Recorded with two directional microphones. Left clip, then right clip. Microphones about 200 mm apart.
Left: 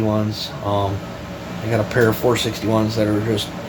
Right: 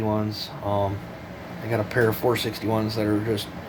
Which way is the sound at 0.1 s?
40° right (ahead or behind).